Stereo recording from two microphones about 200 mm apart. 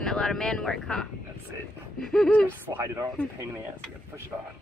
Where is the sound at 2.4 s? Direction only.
10° right (ahead or behind).